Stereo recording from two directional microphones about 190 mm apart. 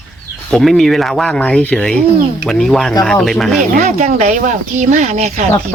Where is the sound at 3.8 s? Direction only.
40° right (ahead or behind).